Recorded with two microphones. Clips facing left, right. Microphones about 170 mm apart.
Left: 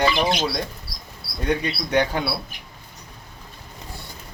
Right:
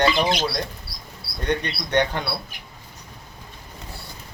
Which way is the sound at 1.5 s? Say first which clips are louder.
Left 1 dB; 5° left (ahead or behind).